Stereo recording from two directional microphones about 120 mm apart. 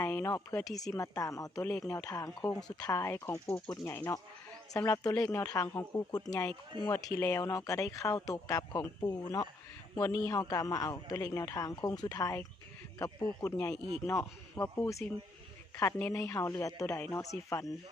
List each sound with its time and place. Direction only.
0.0 s a sound: 25° left (ahead or behind)
0.7 s a man's voice: 30° left (ahead or behind)
6.7 s speech: 45° right (ahead or behind)
7.1 s a man's voice: 20° left (ahead or behind)